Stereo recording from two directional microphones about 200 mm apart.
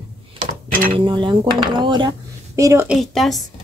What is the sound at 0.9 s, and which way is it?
Speech, 25° right (ahead or behind).